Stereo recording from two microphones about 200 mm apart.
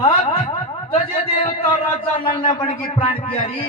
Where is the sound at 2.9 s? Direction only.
25° left (ahead or behind).